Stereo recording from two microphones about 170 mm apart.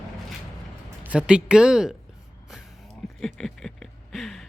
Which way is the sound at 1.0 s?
5° right (ahead or behind).